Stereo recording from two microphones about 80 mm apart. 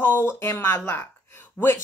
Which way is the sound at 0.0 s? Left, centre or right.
Left.